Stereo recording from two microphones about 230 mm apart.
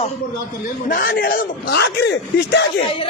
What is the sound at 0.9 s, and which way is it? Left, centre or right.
A man's voice, left.